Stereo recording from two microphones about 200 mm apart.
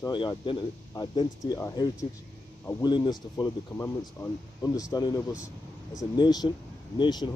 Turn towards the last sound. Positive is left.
turn(degrees=25)  # may be behind; listen again after turning